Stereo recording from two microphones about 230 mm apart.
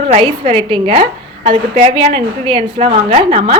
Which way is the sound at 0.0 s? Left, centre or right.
Right.